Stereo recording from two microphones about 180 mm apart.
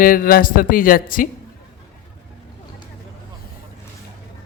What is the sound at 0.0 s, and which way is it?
Speech, 55° left (ahead or behind).